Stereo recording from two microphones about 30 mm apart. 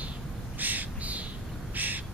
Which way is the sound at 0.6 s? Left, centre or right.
Right.